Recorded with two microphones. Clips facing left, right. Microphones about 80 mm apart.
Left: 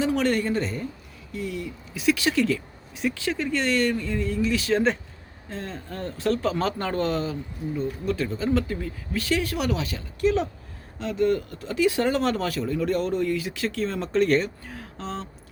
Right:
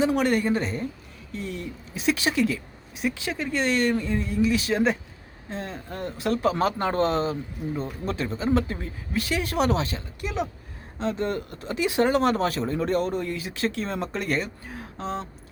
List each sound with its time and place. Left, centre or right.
0.0 s speech: centre
1.3 s speech: right
10.2 s speech: centre
11.0 s speech: right; by 14.5 s centre
14.7 s a sound: centre